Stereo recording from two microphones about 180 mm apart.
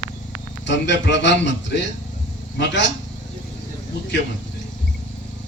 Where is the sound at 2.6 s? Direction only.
80° left.